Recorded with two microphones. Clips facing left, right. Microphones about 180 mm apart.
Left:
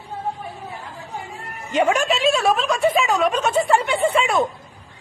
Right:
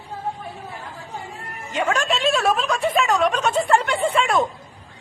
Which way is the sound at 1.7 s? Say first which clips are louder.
Left 4 dB; 15° left (ahead or behind).